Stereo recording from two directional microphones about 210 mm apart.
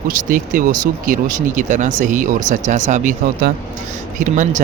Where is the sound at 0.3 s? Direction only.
40° right (ahead or behind).